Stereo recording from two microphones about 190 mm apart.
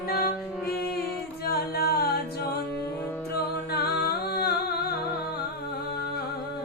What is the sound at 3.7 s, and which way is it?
Music, 55° left (ahead or behind).